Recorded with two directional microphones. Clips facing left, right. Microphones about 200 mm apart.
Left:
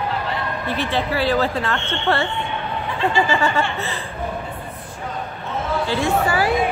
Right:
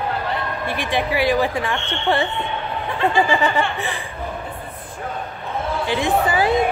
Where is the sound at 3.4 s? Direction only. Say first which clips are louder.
Right 1 dB; 15° right (ahead or behind).